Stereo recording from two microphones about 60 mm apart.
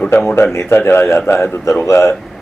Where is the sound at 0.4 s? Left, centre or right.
Left.